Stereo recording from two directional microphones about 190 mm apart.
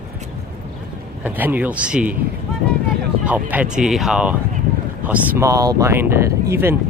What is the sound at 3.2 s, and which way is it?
Speech, 10° right (ahead or behind).